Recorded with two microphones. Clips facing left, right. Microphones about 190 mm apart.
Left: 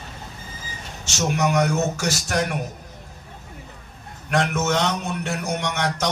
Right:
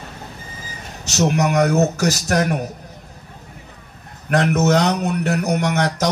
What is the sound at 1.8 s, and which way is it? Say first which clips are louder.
Speech: right 6 dB; 40° right (ahead or behind).